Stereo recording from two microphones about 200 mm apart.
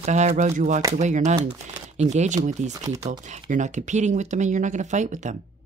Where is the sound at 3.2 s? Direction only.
40° right (ahead or behind).